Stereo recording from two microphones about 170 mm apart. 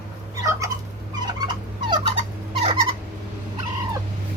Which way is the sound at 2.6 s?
35° right (ahead or behind).